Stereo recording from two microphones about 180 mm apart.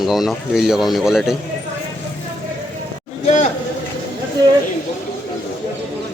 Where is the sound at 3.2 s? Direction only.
40° left (ahead or behind).